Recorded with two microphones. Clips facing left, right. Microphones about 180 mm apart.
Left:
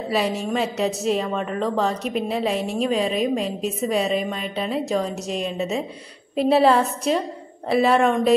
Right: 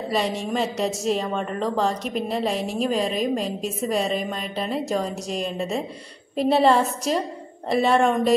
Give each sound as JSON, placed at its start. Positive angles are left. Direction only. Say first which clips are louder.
{"t": 0.1, "sound": "a woman's voice", "louder": "left 2 dB", "side_deg": 5}